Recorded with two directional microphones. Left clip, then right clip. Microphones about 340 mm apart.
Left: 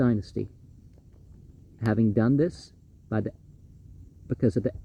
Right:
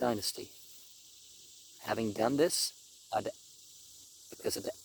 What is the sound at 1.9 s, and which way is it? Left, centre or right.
Speech, centre.